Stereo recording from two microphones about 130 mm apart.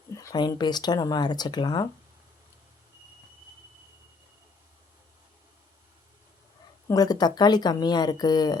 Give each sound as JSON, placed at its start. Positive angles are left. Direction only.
{"t": 0.1, "sound": "speech", "side_deg": 25}
{"t": 6.8, "sound": "speech", "side_deg": 30}